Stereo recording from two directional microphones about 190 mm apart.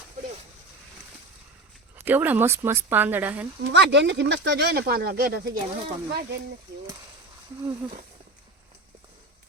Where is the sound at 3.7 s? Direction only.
65° right (ahead or behind).